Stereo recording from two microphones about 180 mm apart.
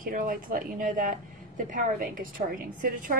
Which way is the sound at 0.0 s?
50° right (ahead or behind).